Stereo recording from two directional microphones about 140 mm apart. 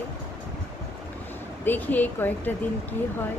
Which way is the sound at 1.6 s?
15° left (ahead or behind).